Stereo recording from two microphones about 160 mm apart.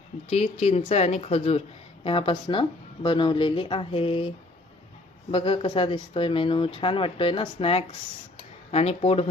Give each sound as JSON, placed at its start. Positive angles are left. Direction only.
{"t": 0.3, "sound": "speech", "side_deg": 40}
{"t": 5.3, "sound": "speech", "side_deg": 30}